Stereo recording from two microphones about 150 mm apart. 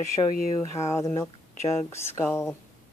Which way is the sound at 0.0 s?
60° left (ahead or behind).